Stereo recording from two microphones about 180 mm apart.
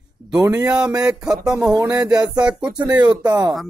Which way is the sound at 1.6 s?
20° right (ahead or behind).